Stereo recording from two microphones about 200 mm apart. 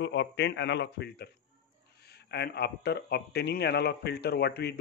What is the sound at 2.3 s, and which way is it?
A man's voice, 55° left (ahead or behind).